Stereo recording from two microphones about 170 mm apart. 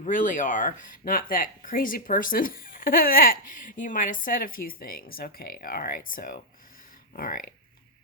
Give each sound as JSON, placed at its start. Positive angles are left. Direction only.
{"t": 0.0, "sound": "speech", "side_deg": 50}